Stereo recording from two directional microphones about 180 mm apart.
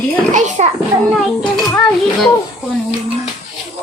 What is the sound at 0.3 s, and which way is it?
Children playing, 40° right (ahead or behind).